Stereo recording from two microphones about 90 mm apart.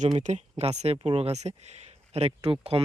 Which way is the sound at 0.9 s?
90° right.